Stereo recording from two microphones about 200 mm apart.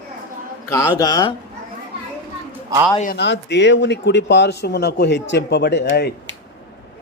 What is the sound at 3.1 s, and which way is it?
Speech, 60° left (ahead or behind).